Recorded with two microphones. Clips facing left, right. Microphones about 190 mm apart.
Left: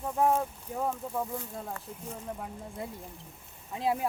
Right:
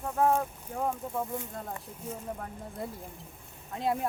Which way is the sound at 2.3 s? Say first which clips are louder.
Even; 5° left (ahead or behind).